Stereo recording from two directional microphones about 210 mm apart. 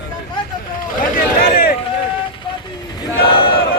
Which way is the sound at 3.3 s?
25° left (ahead or behind).